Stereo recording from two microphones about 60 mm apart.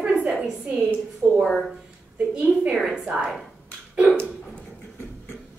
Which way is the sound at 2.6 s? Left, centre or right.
Centre.